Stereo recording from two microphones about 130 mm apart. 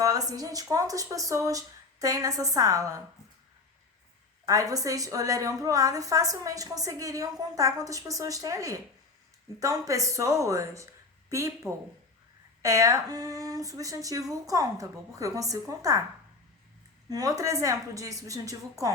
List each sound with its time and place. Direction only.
0.0 s a woman's voice: 25° right (ahead or behind)
4.4 s a woman's voice: 25° right (ahead or behind)
17.1 s a woman's voice: 30° right (ahead or behind)